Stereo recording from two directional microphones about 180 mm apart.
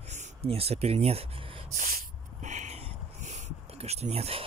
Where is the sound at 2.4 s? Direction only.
40° right (ahead or behind).